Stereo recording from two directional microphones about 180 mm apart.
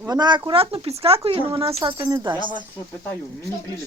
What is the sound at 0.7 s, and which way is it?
Speech, 35° right (ahead or behind).